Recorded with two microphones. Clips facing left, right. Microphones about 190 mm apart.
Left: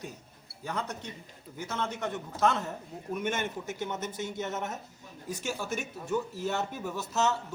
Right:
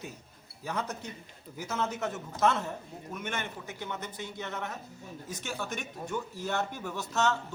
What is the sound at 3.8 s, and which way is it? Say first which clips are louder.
Speech: left 3 dB; 20° left (ahead or behind).